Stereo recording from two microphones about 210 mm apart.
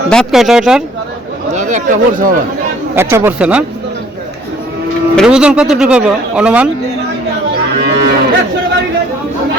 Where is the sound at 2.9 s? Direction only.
10° right (ahead or behind).